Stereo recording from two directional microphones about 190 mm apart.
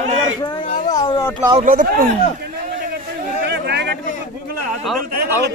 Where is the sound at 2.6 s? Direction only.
50° right (ahead or behind).